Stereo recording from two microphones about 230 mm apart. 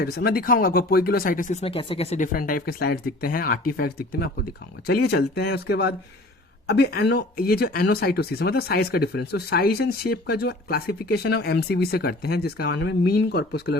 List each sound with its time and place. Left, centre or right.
0.0 s speech: left
1.6 s speech: left